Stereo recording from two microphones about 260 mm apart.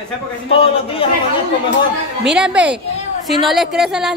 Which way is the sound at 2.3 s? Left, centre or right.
Centre.